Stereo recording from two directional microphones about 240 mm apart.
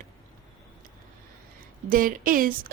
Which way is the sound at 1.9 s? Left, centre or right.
Right.